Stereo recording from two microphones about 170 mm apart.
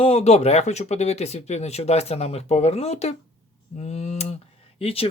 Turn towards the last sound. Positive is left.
turn(degrees=35)  # may be behind; listen again after turning